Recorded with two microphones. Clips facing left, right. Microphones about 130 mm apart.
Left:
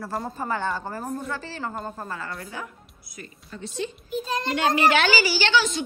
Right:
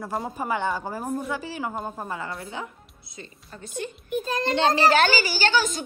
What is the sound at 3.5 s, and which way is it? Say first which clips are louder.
Speech: left 2 dB; 50° right (ahead or behind).